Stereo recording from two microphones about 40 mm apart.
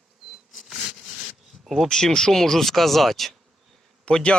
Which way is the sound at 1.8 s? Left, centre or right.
Centre.